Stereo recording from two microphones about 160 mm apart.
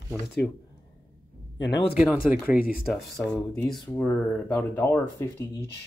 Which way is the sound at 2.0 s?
10° right (ahead or behind).